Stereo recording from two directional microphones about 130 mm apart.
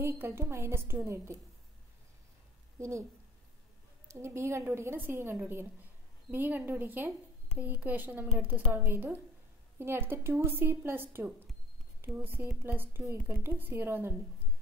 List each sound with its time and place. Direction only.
0.0 s a woman's voice: 20° right (ahead or behind)
2.8 s a woman's voice: 25° right (ahead or behind)
4.1 s a woman's voice: 20° right (ahead or behind)